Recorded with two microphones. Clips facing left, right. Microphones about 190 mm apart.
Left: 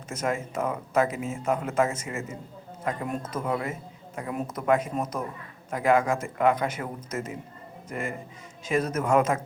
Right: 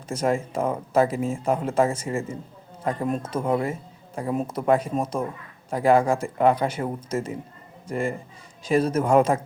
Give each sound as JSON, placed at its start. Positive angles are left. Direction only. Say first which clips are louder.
{"t": 0.1, "sound": "speech", "louder": "right 5 dB", "side_deg": -30}